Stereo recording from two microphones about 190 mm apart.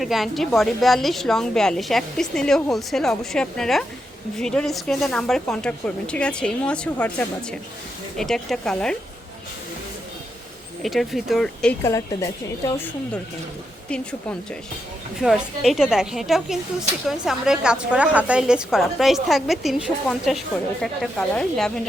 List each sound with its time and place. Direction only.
0.0 s a woman's voice: centre (ahead or behind)
10.8 s a woman's voice: centre (ahead or behind)
11.8 s a woman's voice: 15° left (ahead or behind)
13.9 s a woman's voice: 5° left (ahead or behind)